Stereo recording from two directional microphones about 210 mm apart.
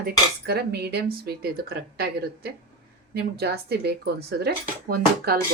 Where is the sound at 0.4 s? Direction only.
50° right (ahead or behind).